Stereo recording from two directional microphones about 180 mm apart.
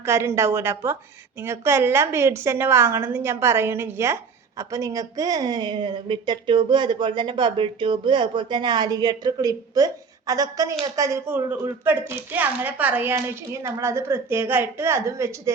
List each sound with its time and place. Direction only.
0.0 s a woman's voice: 15° right (ahead or behind)